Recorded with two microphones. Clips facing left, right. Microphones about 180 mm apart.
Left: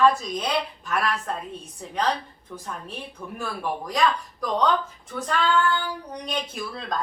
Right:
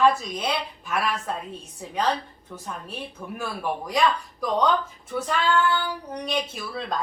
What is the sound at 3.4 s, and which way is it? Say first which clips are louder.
A woman's voice: even; 10° right (ahead or behind).